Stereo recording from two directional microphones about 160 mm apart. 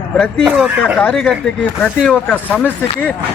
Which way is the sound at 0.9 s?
5° left (ahead or behind).